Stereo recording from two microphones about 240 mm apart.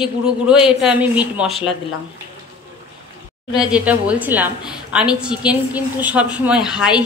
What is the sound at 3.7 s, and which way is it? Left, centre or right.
A woman's voice, centre.